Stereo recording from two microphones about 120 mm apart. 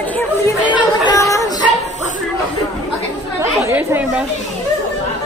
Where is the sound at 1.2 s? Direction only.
25° left (ahead or behind).